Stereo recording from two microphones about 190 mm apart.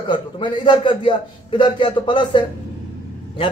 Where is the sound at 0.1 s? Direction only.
25° left (ahead or behind).